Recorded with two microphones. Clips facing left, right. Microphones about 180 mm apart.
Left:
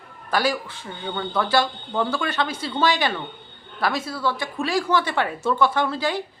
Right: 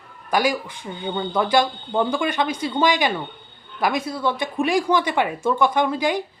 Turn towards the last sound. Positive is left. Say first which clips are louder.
# right 3 dB
turn(degrees=-15)  # may be behind; listen again after turning